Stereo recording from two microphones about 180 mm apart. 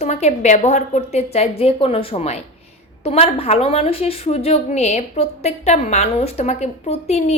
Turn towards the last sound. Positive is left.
turn(degrees=35)  # may be behind; listen again after turning